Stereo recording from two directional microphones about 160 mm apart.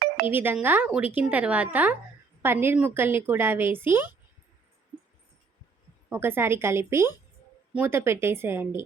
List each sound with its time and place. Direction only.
0.3 s a woman's voice: 10° right (ahead or behind)
6.1 s a woman's voice: 15° right (ahead or behind)